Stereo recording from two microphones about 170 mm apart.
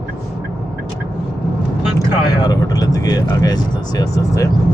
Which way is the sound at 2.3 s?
25° left (ahead or behind).